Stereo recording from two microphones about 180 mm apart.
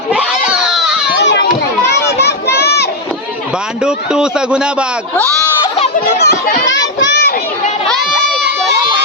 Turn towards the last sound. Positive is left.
turn(degrees=65)  # may be behind; listen again after turning